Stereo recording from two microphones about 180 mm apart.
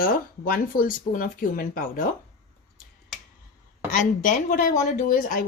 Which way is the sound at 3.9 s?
50° left (ahead or behind).